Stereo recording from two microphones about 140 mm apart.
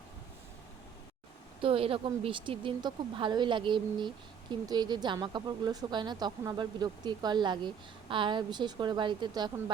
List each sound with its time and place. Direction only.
1.6 s a woman's voice: 40° right (ahead or behind)